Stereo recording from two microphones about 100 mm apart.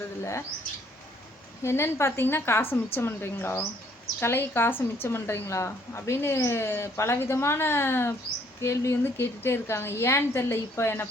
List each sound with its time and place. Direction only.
0.2 s speech: 30° left (ahead or behind)
1.6 s speech: 25° left (ahead or behind)